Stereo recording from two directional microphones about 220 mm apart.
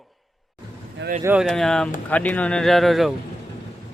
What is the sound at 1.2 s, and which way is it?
Speech, centre (ahead or behind).